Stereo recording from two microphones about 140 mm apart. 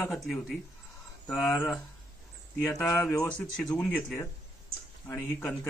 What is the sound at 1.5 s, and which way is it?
Speech, 15° left (ahead or behind).